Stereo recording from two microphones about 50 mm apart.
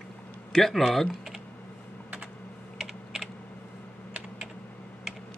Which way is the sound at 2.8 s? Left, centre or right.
Centre.